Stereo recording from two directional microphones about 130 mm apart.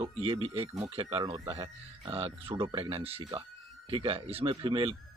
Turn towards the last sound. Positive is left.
turn(degrees=-40)  # may be behind; listen again after turning